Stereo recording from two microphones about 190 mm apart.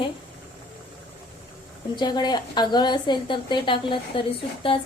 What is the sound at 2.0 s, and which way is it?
A woman's voice, 25° left (ahead or behind).